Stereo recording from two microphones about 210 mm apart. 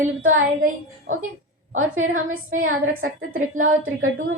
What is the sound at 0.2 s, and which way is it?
Speech, 70° right (ahead or behind).